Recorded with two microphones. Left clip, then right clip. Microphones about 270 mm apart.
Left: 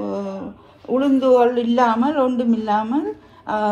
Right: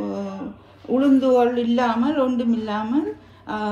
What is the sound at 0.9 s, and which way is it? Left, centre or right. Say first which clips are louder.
A man's voice: left 2 dB; left.